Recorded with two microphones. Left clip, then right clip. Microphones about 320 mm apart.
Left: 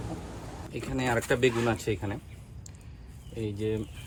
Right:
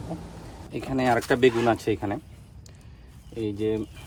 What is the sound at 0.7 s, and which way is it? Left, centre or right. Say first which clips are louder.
Speech: right 6 dB; right.